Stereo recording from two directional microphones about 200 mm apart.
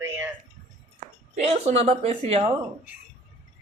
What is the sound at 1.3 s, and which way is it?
A woman's voice, 35° right (ahead or behind).